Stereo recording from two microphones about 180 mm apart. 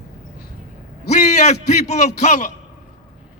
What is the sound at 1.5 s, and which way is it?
A man's voice, 40° left (ahead or behind).